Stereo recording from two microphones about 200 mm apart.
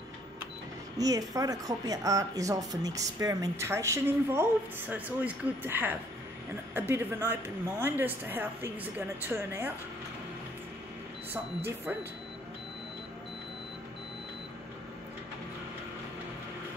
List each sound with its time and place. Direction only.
0.9 s speech: 20° right (ahead or behind)
11.3 s speech: 10° right (ahead or behind)